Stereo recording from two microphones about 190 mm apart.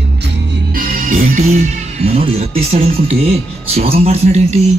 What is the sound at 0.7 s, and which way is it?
Music, 50° right (ahead or behind).